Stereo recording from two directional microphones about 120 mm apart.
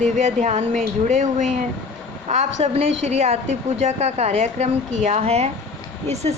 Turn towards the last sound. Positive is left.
turn(degrees=-65)  # may be behind; listen again after turning